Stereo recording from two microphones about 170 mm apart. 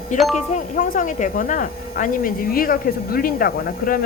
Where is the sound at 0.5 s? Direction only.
50° left (ahead or behind).